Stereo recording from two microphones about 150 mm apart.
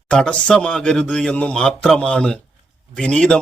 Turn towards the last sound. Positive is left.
turn(degrees=5)  # may be behind; listen again after turning